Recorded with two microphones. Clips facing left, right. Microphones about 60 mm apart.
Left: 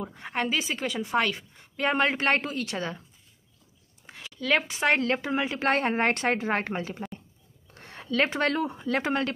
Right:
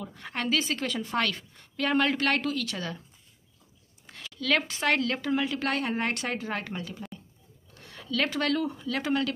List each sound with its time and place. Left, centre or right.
0.0 s a woman's voice: left
4.1 s a woman's voice: centre; by 9.3 s left